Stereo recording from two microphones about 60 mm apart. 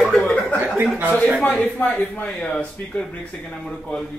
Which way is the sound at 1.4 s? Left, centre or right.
Left.